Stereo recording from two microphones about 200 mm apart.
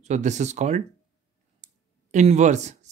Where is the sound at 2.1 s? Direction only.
35° right (ahead or behind).